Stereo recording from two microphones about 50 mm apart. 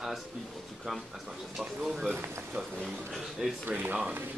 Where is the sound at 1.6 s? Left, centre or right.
Centre.